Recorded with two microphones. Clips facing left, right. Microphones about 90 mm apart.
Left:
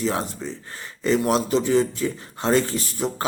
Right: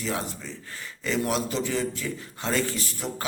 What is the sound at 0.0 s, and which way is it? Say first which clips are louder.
A man's voice: left 6 dB; 30° left (ahead or behind).